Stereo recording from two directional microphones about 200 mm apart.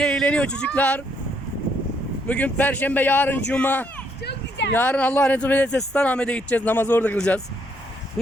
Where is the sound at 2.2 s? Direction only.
5° left (ahead or behind).